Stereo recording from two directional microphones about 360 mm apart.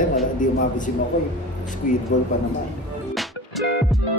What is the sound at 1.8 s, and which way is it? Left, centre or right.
Speech, left.